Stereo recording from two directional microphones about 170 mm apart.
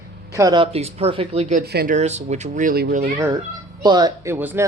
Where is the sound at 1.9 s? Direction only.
40° right (ahead or behind).